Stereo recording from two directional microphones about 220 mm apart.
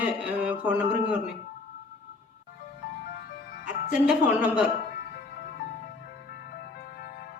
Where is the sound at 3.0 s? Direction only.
45° left (ahead or behind).